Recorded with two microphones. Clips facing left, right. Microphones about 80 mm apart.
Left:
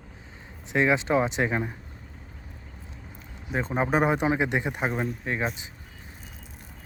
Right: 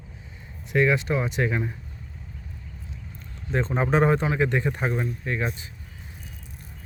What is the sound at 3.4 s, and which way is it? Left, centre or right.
Speech, centre.